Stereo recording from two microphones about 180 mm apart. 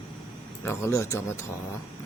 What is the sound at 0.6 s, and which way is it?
Speech, 15° left (ahead or behind).